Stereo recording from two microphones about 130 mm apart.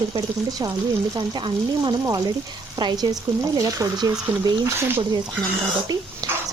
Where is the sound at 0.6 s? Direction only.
35° right (ahead or behind).